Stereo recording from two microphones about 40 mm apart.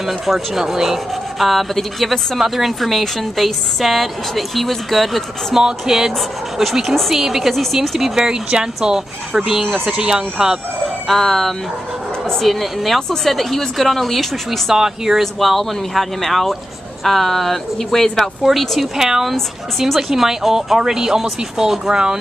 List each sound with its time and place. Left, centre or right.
0.0 s speech: centre
5.5 s speech: centre
7.5 s speech: centre
8.2 s speech: right
8.9 s speech: centre
11.1 s speech: centre
14.7 s speech: centre
18.4 s speech: centre